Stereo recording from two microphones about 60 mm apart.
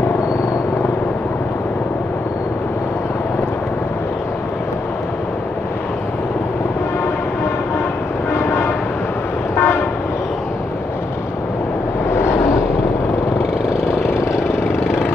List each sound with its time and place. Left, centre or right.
8.4 s train: left
9.6 s vehicle: left
12.1 s vehicle: left
13.7 s vehicle: left